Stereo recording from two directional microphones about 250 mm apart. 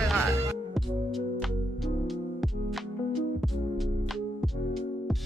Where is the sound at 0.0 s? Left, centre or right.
Centre.